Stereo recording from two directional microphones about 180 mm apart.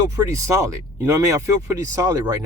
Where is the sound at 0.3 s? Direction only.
15° right (ahead or behind).